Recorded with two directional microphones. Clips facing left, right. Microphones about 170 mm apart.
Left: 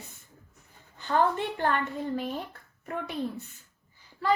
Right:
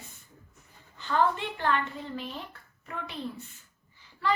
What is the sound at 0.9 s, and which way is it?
Speech, 50° left (ahead or behind).